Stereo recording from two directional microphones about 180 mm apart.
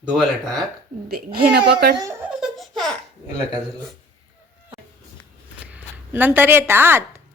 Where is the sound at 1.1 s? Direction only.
60° right (ahead or behind).